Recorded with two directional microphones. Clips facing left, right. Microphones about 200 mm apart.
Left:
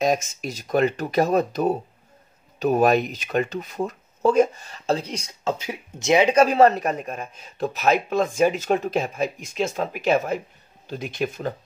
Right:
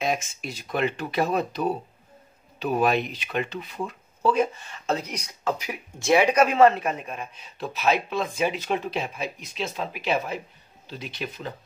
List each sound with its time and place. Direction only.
0.0 s speech: 40° left (ahead or behind)